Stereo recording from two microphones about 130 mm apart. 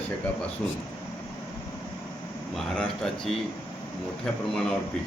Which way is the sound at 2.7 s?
5° left (ahead or behind).